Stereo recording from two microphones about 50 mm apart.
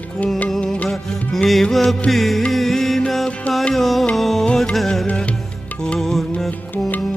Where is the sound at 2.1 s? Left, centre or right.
Centre.